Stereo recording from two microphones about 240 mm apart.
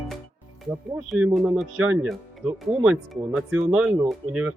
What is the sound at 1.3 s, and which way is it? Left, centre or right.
Speech, centre.